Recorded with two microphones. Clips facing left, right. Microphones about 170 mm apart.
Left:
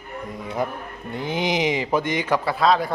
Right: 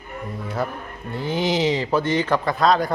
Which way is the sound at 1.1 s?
15° left (ahead or behind).